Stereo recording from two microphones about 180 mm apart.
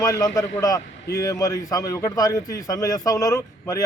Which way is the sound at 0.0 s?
20° left (ahead or behind).